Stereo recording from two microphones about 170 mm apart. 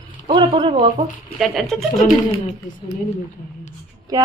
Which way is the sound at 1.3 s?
Centre (ahead or behind).